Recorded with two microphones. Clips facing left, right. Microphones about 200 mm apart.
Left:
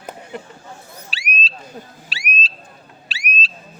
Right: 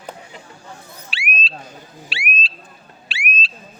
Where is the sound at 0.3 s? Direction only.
60° left (ahead or behind).